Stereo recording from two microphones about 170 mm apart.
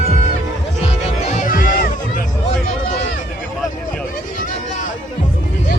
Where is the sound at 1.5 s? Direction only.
55° left (ahead or behind).